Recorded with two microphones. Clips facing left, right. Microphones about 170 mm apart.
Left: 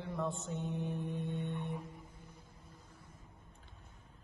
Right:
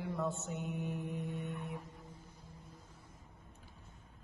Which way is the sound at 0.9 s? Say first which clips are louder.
Left 1 dB; 30° left (ahead or behind).